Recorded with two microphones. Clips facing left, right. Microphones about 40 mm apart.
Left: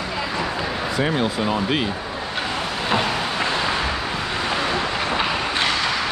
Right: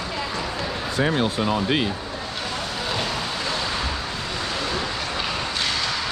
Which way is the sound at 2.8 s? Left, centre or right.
Left.